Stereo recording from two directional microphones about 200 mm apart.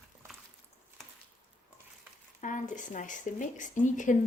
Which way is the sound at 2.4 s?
40° left (ahead or behind).